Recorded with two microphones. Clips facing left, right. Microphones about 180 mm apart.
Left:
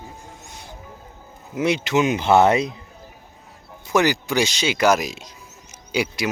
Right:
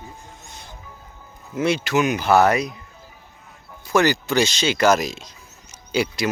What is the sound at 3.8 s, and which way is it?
Speech, 15° left (ahead or behind).